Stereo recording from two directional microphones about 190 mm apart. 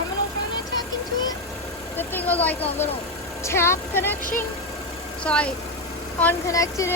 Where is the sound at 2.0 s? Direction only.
10° left (ahead or behind).